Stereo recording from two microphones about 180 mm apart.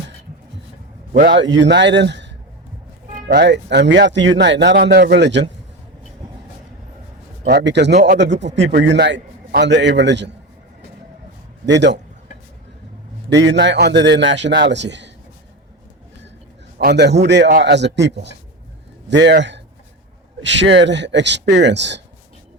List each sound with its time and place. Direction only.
1.4 s speech: 90° right
3.2 s a man's voice: 60° right (ahead or behind); by 4.8 s 85° right
4.8 s a man's voice: 65° right (ahead or behind)
7.6 s a man's voice: 75° right (ahead or behind)
11.6 s speech: 80° right
13.3 s a man's voice: 80° right
16.7 s a man's voice: 65° right (ahead or behind)